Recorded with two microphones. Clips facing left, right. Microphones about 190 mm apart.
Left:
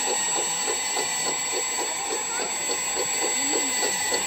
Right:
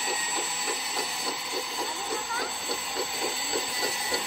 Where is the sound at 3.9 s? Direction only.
Centre (ahead or behind).